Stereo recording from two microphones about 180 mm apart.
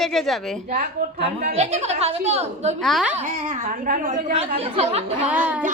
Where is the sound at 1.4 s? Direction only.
40° right (ahead or behind).